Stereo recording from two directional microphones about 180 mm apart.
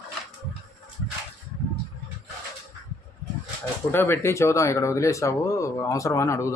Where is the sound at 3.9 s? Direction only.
10° left (ahead or behind).